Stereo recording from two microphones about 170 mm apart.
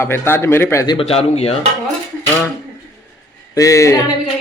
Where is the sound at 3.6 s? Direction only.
20° left (ahead or behind).